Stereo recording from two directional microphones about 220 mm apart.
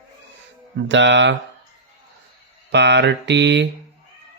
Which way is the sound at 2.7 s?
50° right (ahead or behind).